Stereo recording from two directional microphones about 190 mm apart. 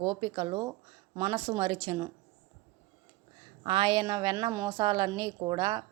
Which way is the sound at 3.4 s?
25° right (ahead or behind).